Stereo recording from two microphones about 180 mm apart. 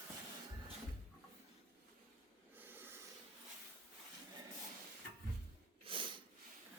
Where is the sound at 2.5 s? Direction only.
10° right (ahead or behind).